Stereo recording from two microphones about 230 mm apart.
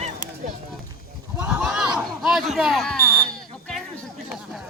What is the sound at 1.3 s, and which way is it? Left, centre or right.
Smoke detector, centre.